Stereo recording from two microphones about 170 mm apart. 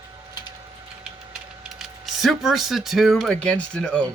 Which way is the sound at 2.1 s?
Centre (ahead or behind).